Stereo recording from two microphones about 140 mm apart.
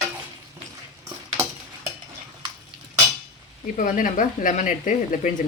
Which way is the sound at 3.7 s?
70° left (ahead or behind).